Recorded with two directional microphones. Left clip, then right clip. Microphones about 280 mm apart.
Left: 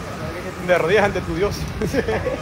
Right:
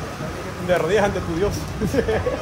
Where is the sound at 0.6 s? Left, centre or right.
Centre.